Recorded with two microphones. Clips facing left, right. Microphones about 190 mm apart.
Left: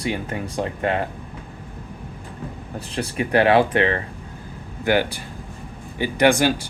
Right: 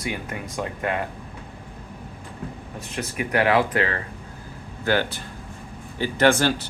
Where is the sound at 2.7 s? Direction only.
30° left (ahead or behind).